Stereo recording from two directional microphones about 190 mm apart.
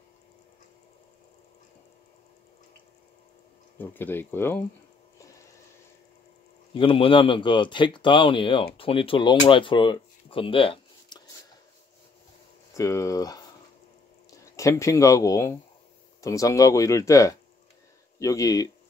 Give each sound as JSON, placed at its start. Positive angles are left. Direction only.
{"t": 3.7, "sound": "speech", "side_deg": 10}
{"t": 6.7, "sound": "speech", "side_deg": 25}
{"t": 12.7, "sound": "speech", "side_deg": 15}
{"t": 14.4, "sound": "speech", "side_deg": 15}